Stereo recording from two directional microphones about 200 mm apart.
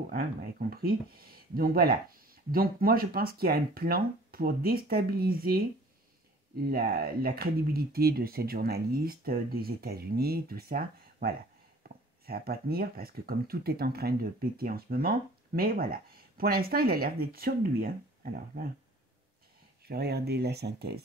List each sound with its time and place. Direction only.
0.1 s speech: 45° right (ahead or behind)
6.6 s speech: 50° right (ahead or behind)
11.8 s a sound: 50° right (ahead or behind)
12.3 s speech: 50° right (ahead or behind)
19.9 s speech: 55° right (ahead or behind)